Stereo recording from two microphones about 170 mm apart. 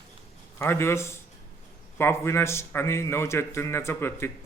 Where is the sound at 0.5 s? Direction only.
15° left (ahead or behind).